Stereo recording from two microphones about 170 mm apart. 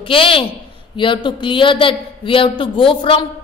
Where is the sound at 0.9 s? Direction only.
30° left (ahead or behind).